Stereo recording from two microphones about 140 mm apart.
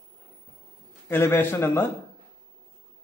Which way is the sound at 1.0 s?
15° left (ahead or behind).